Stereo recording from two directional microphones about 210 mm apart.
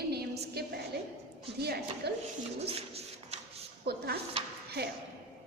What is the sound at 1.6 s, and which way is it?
Speech, 50° right (ahead or behind).